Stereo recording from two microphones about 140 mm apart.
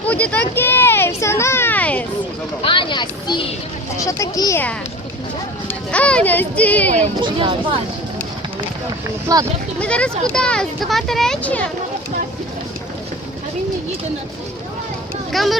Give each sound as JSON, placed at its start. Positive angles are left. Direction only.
{"t": 0.1, "sound": "a sound", "side_deg": 10}
{"t": 2.6, "sound": "speech", "side_deg": 35}
{"t": 3.9, "sound": "speech", "side_deg": 25}
{"t": 5.6, "sound": "speech", "side_deg": 10}
{"t": 7.2, "sound": "speech", "side_deg": -40}
{"t": 9.3, "sound": "speech", "side_deg": -25}
{"t": 9.8, "sound": "speech", "side_deg": 10}
{"t": 15.3, "sound": "speech", "side_deg": 0}